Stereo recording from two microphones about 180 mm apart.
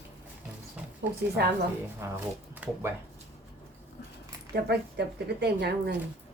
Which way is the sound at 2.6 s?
10° right (ahead or behind).